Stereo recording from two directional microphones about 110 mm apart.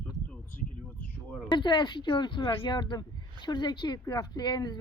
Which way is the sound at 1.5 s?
45° left (ahead or behind).